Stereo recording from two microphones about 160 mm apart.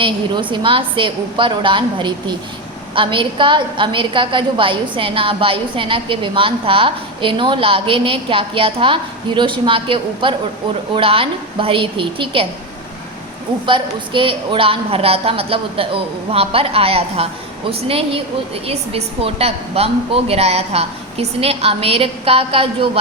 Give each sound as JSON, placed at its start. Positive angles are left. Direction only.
{"t": 0.5, "sound": "a woman's voice", "side_deg": -30}
{"t": 13.7, "sound": "a woman's voice", "side_deg": -30}